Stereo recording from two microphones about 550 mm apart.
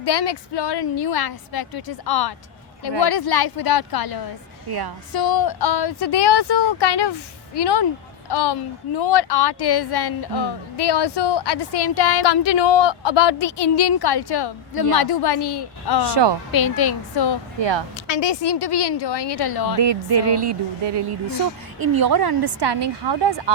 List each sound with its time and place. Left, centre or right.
0.0 s a woman's voice: left
16.0 s speech: right
16.5 s a woman's voice: left
17.6 s speech: right
17.9 s speech: left
19.8 s speech: right